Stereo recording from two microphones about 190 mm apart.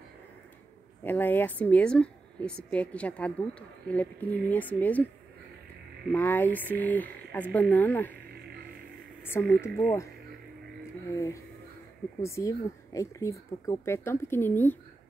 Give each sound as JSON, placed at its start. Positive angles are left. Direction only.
{"t": 1.0, "sound": "a woman's voice", "side_deg": 10}
{"t": 6.1, "sound": "a woman's voice", "side_deg": 10}
{"t": 9.2, "sound": "speech", "side_deg": 10}
{"t": 11.1, "sound": "a woman's voice", "side_deg": 15}